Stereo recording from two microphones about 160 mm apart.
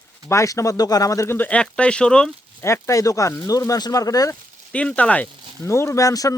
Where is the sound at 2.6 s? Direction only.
20° left (ahead or behind).